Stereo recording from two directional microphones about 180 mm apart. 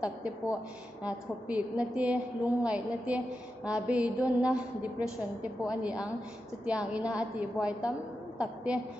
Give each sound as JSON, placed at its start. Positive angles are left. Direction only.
{"t": 0.0, "sound": "a woman's voice", "side_deg": -5}